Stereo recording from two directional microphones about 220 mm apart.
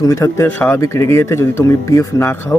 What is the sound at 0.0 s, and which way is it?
Speech, 15° left (ahead or behind).